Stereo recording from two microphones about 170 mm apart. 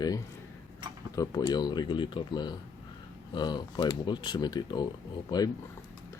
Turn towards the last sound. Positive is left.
turn(degrees=25)  # may be behind; listen again after turning